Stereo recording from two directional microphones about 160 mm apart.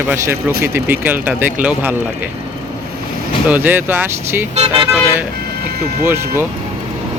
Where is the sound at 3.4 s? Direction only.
10° right (ahead or behind).